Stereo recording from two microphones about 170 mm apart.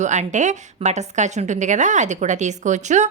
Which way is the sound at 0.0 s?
45° right (ahead or behind).